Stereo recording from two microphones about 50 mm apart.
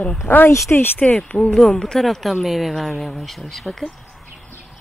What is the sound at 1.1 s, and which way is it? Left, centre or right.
Speech, left.